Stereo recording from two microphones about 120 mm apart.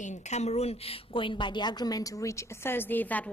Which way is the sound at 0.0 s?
70° left (ahead or behind).